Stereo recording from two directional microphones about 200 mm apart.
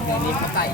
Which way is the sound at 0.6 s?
50° left (ahead or behind).